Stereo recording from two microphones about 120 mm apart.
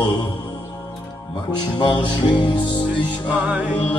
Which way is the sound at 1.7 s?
40° left (ahead or behind).